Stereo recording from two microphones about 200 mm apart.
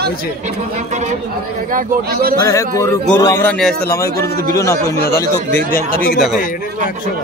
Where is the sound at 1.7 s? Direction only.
45° right (ahead or behind).